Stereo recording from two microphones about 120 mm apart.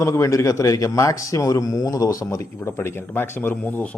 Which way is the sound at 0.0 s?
25° left (ahead or behind).